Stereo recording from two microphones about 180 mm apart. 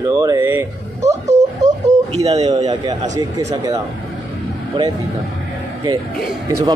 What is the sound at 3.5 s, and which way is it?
Speech, 25° right (ahead or behind).